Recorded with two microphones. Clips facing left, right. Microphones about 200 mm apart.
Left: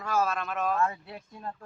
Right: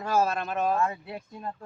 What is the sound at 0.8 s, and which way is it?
Speech, 15° right (ahead or behind).